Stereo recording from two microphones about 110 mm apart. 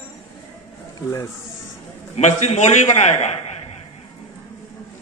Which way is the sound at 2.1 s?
90° left.